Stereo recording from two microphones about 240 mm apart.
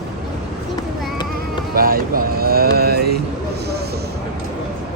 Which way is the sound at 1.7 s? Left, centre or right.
Right.